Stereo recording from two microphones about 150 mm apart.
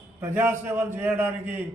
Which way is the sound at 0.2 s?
15° right (ahead or behind).